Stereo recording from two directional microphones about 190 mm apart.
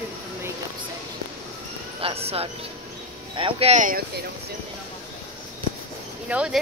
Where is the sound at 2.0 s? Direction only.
30° right (ahead or behind).